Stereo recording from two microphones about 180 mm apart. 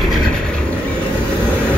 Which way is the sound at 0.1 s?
5° left (ahead or behind).